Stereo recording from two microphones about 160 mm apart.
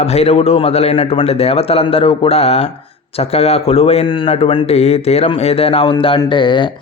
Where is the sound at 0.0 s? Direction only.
40° left (ahead or behind).